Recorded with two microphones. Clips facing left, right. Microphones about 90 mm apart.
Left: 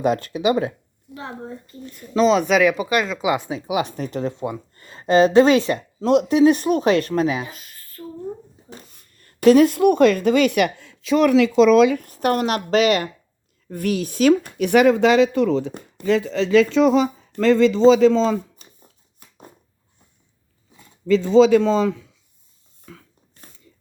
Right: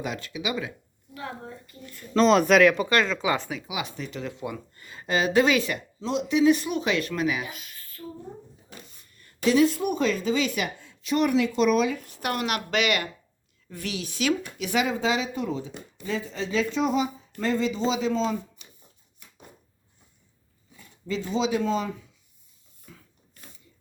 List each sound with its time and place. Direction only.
0.0 s speech: 45° left (ahead or behind)
1.1 s a woman's voice: 25° left (ahead or behind)
2.1 s speech: centre (ahead or behind)
3.7 s a woman's voice: 45° left (ahead or behind)
9.2 s a woman's voice: 50° left (ahead or behind); by 11.9 s 90° left
11.9 s a woman's voice: 45° left (ahead or behind)
13.7 s speech: 50° left (ahead or behind); by 18.3 s 90° left
18.6 s a sound: 40° left (ahead or behind)
21.1 s speech: 85° left